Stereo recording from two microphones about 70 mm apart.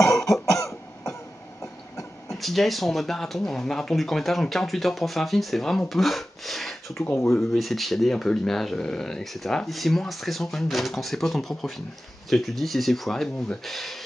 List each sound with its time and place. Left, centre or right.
0.0 s cough: left
1.6 s train: left
2.3 s speech: centre